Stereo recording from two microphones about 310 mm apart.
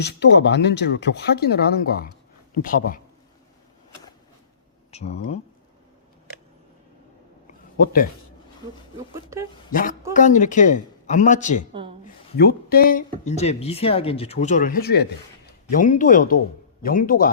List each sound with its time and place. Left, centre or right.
0.0 s speech: left
4.9 s speech: left
7.4 s a sound: left
9.3 s speech: centre
9.7 s speech: left
11.7 s speech: centre
12.4 s speech: left